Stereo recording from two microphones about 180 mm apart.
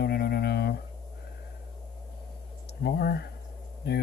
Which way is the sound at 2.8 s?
60° left (ahead or behind).